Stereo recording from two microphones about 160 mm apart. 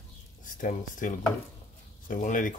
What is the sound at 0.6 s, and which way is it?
Speech, 55° left (ahead or behind).